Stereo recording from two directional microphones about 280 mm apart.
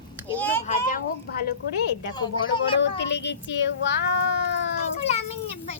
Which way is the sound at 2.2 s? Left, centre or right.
Centre.